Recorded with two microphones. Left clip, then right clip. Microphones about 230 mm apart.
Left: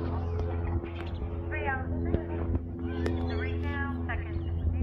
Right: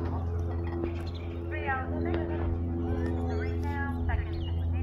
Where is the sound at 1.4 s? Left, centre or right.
Centre.